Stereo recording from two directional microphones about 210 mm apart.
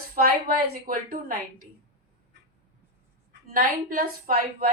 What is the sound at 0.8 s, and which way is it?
Speech, 40° right (ahead or behind).